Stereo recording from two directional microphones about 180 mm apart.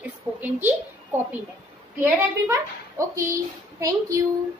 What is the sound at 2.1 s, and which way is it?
A woman's voice, 15° right (ahead or behind).